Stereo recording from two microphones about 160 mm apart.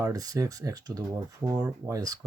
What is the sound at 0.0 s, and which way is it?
Speech, 20° right (ahead or behind).